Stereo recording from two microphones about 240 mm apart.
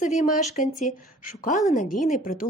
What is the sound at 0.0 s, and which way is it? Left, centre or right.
A woman's voice, left.